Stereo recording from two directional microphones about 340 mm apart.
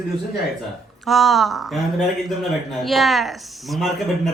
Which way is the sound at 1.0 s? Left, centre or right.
Centre.